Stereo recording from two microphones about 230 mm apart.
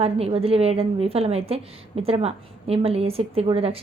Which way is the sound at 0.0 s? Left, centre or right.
Right.